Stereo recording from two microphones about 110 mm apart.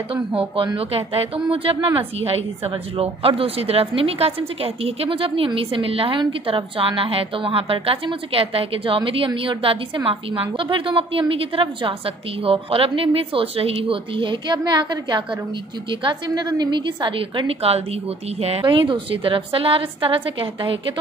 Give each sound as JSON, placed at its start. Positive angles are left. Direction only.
{"t": 0.7, "sound": "a woman's voice", "side_deg": -60}
{"t": 17.6, "sound": "a woman's voice", "side_deg": -65}
{"t": 18.6, "sound": "speech", "side_deg": -50}